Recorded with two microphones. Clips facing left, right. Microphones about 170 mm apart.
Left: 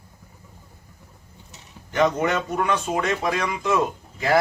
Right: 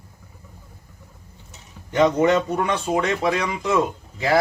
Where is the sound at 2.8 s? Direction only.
10° right (ahead or behind).